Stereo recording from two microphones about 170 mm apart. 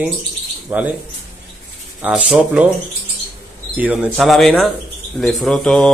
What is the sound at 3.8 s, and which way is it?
Speech, 10° right (ahead or behind).